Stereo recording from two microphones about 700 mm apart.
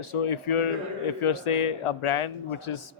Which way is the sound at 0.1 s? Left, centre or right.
Left.